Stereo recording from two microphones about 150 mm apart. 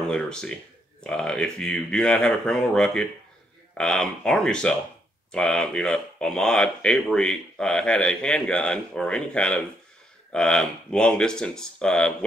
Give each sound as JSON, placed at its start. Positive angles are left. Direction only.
{"t": 0.0, "sound": "speech", "side_deg": 5}